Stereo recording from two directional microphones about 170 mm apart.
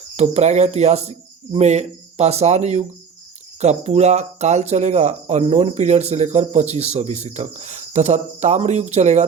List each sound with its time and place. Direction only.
0.2 s speech: 40° right (ahead or behind)